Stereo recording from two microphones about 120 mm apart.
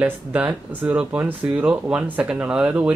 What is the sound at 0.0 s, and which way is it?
Speech, 15° right (ahead or behind).